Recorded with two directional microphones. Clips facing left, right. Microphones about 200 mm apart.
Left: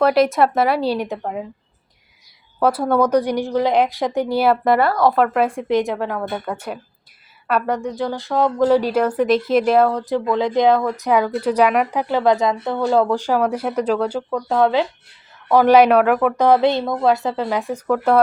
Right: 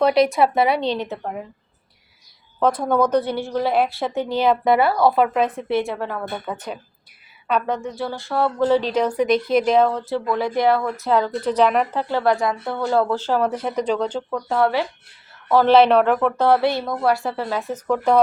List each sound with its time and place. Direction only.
0.0 s speech: centre (ahead or behind)
2.6 s a woman's voice: 10° left (ahead or behind)
5.5 s a woman's voice: 15° left (ahead or behind)